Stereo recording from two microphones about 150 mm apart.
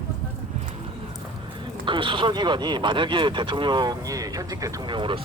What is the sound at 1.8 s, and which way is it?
Speech, 35° right (ahead or behind).